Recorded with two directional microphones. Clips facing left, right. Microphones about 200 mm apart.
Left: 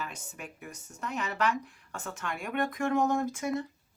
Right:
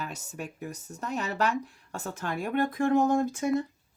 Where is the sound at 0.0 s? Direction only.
40° right (ahead or behind).